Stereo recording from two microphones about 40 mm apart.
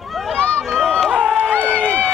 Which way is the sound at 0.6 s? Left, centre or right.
Centre.